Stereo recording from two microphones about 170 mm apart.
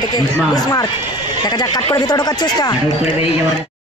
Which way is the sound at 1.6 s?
25° left (ahead or behind).